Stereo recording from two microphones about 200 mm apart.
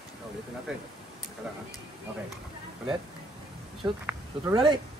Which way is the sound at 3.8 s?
20° right (ahead or behind).